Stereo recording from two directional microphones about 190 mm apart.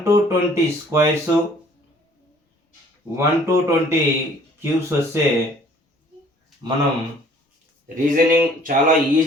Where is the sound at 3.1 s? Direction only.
15° right (ahead or behind).